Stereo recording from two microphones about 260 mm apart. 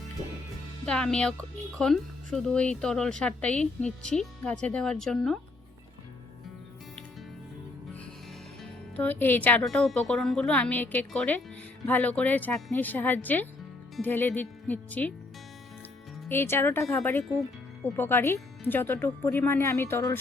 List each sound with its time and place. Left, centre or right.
0.9 s a woman's voice: centre
9.0 s a woman's voice: centre
16.3 s speech: centre